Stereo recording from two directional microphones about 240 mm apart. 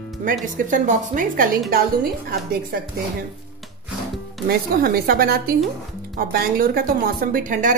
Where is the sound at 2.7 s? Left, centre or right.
Right.